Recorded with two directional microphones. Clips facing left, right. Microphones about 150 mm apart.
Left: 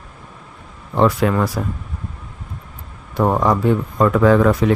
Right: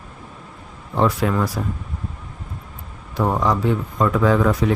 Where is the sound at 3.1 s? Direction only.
50° left (ahead or behind).